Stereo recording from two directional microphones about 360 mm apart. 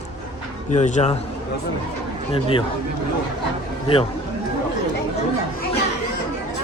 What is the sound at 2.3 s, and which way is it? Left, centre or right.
Speech, centre.